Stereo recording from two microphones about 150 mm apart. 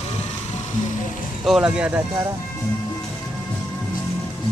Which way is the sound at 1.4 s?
5° right (ahead or behind).